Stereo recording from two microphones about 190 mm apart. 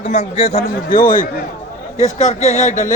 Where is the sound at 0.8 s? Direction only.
45° left (ahead or behind).